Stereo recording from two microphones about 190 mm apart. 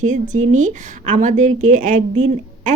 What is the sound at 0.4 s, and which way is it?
A woman's voice, 40° right (ahead or behind).